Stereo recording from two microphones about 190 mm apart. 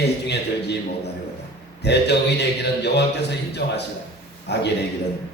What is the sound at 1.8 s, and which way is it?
A man's voice, 65° left (ahead or behind).